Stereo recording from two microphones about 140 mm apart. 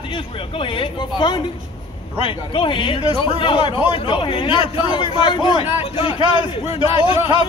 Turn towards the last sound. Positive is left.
turn(degrees=35)  # may be behind; listen again after turning